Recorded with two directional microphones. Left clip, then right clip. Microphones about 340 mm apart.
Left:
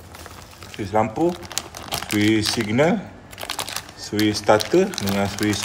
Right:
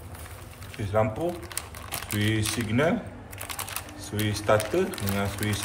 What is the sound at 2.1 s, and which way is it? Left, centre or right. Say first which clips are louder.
Speech: left 9 dB; centre.